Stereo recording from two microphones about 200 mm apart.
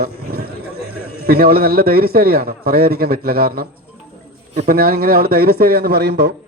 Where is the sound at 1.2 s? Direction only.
50° right (ahead or behind).